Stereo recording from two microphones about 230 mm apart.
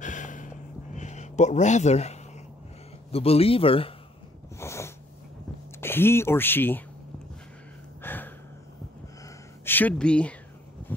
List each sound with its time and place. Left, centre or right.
0.0 s gasp: left
0.9 s a man's voice: left
4.6 s snort: centre
5.8 s speech: centre
8.0 s gasp: centre
9.7 s speech: centre
10.9 s a sound: centre